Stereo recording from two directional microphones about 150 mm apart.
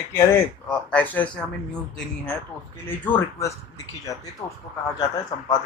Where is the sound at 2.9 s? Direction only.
15° left (ahead or behind).